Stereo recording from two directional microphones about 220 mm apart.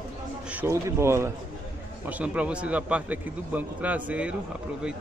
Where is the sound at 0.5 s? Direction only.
10° right (ahead or behind).